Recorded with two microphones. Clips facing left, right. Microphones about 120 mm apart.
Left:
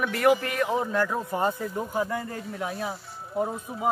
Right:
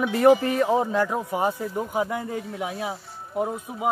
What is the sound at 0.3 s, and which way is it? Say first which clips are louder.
Speech: right 5 dB; 30° right (ahead or behind).